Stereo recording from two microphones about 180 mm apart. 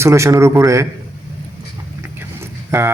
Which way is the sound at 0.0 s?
15° right (ahead or behind).